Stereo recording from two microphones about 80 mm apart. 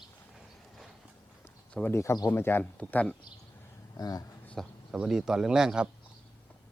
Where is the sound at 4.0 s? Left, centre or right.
Left.